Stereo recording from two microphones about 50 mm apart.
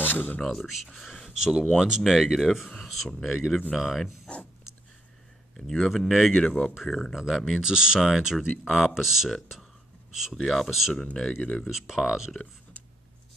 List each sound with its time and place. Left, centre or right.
0.0 s speech: left
0.4 s speech: centre
5.8 s speech: centre
10.3 s speech: centre
11.4 s speech: left
11.7 s speech: centre